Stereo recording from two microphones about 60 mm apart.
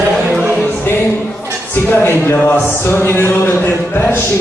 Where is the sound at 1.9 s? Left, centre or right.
Left.